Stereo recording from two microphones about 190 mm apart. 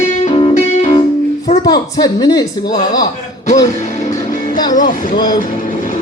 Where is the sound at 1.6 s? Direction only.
20° left (ahead or behind).